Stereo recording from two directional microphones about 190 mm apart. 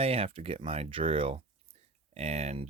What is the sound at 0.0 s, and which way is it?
Speech, 30° right (ahead or behind).